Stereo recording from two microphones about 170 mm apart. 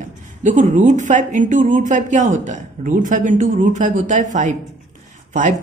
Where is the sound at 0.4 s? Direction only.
45° right (ahead or behind).